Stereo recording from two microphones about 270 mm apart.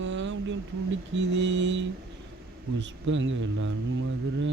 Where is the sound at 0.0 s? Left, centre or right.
Right.